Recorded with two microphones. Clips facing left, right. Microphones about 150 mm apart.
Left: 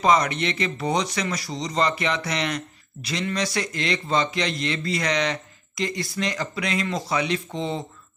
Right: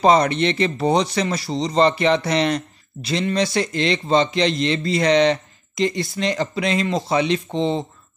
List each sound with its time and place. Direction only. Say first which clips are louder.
0.0 s a man's voice: right 5 dB; 30° right (ahead or behind)